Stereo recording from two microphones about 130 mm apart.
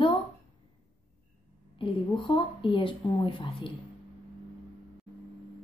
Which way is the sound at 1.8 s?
40° left (ahead or behind).